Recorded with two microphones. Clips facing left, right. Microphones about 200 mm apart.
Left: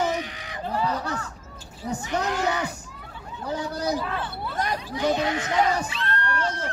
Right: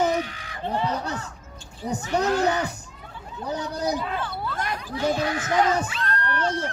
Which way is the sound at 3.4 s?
20° right (ahead or behind).